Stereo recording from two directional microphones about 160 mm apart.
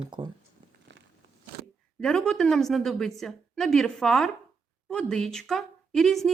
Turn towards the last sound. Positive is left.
turn(degrees=0)  # may be behind; listen again after turning